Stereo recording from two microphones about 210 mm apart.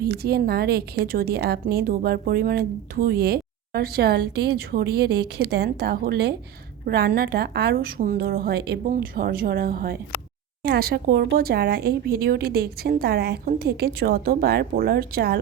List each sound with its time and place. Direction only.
0.0 s speech: 50° right (ahead or behind)